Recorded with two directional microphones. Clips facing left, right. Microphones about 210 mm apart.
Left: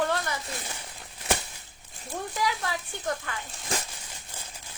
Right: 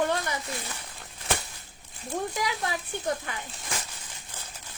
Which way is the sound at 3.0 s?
20° right (ahead or behind).